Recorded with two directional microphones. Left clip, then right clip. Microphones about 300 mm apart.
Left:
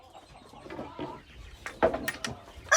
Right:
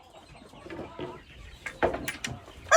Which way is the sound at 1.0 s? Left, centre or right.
Left.